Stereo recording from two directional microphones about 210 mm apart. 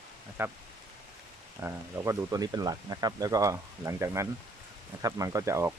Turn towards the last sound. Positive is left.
turn(degrees=-15)  # may be behind; listen again after turning